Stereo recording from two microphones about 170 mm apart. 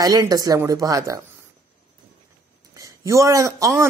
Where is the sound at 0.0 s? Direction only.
20° right (ahead or behind).